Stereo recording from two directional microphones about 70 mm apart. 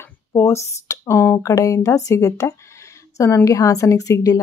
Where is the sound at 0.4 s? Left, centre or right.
Left.